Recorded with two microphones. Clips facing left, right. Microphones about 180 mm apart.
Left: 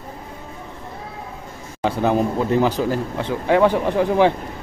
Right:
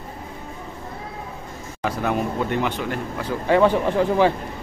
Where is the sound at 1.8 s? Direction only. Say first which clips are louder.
Left 5 dB; 30° left (ahead or behind).